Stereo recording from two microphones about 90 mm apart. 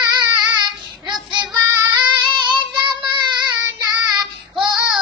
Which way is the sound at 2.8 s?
60° right (ahead or behind).